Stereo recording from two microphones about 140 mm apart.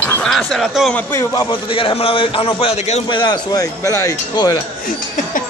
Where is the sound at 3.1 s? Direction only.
30° left (ahead or behind).